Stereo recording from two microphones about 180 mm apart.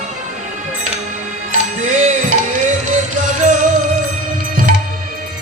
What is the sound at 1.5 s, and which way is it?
Music, 45° right (ahead or behind).